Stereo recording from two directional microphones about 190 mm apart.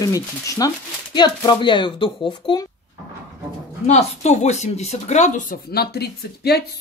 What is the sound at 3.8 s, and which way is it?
Speech, 35° left (ahead or behind).